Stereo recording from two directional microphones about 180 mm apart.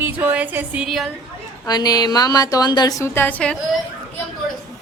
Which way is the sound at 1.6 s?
20° left (ahead or behind).